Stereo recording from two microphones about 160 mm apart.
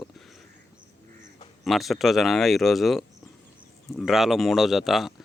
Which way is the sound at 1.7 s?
Centre (ahead or behind).